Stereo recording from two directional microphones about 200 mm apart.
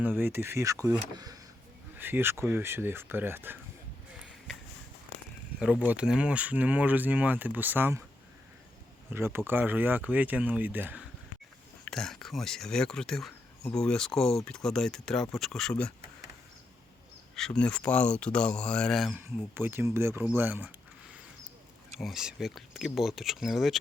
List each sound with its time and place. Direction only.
0.0 s speech: 10° right (ahead or behind)
5.9 s speech: 5° right (ahead or behind)
9.0 s speech: 10° right (ahead or behind)
11.9 s speech: centre (ahead or behind)
17.3 s speech: 5° left (ahead or behind)
19.5 s speech: 10° right (ahead or behind)
22.0 s speech: 5° right (ahead or behind)